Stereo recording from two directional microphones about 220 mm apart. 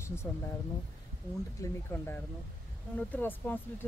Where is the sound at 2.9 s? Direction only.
10° left (ahead or behind).